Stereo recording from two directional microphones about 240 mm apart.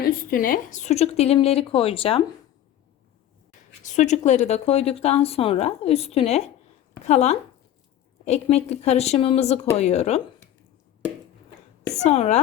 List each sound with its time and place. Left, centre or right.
0.0 s speech: left
3.8 s speech: left
11.9 s speech: left